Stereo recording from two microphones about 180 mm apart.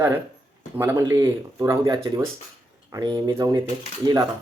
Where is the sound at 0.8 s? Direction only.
15° right (ahead or behind).